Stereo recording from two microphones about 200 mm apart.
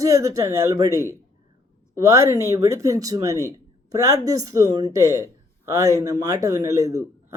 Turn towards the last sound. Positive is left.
turn(degrees=-15)  # may be behind; listen again after turning